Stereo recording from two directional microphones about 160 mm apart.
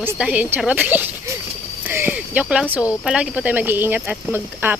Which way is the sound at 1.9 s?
10° right (ahead or behind).